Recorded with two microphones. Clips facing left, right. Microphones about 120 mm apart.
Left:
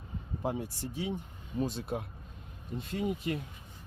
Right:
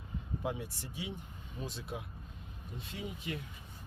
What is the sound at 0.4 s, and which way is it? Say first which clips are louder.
Speech: left 6 dB; 40° left (ahead or behind).